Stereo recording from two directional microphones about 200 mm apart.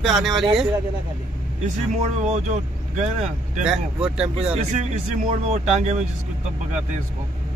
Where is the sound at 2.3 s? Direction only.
35° right (ahead or behind).